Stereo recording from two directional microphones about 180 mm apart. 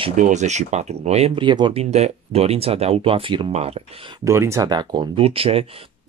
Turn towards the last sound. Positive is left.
turn(degrees=-30)  # may be behind; listen again after turning